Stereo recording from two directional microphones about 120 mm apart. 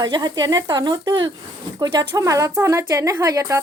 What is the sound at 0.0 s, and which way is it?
A woman's voice, 35° right (ahead or behind).